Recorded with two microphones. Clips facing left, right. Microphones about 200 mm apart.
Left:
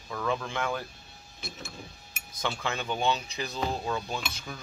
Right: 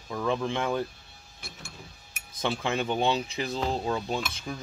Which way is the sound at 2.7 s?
25° right (ahead or behind).